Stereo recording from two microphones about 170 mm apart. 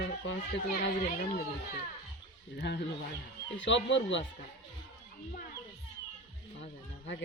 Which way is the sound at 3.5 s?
90° left.